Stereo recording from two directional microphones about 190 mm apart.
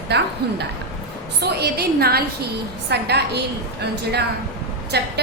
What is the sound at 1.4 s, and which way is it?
A woman's voice, 60° right (ahead or behind).